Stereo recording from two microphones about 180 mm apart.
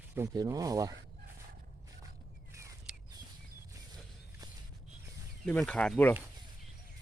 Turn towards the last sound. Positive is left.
turn(degrees=5)  # may be behind; listen again after turning